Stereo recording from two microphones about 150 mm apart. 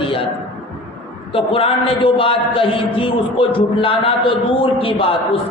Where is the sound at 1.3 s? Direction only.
35° left (ahead or behind).